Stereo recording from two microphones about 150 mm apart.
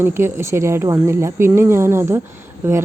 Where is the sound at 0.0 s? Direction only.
15° right (ahead or behind).